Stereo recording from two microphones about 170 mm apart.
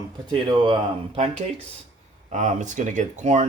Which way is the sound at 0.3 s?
30° right (ahead or behind).